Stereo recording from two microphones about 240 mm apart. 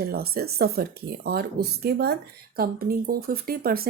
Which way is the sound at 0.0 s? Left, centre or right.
Right.